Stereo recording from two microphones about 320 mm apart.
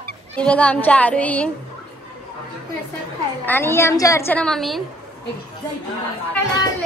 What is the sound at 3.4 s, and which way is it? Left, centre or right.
A woman's voice, centre.